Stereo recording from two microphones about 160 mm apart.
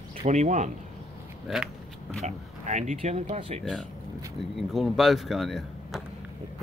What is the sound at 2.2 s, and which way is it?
Speech, 45° right (ahead or behind).